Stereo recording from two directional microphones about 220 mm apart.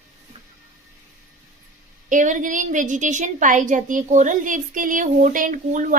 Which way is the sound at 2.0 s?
35° right (ahead or behind).